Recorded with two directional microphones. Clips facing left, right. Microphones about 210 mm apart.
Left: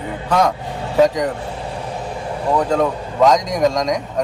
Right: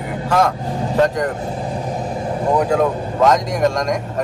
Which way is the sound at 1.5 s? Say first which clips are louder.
Right 3 dB; 40° right (ahead or behind).